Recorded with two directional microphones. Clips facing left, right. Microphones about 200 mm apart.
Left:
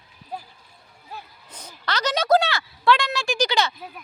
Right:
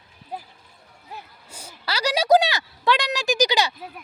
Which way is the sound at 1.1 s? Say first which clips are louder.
Even; 15° right (ahead or behind).